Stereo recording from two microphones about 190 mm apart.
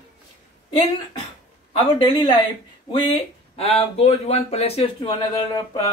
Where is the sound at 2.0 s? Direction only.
25° left (ahead or behind).